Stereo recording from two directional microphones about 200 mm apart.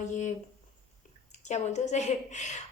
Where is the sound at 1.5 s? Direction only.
35° left (ahead or behind).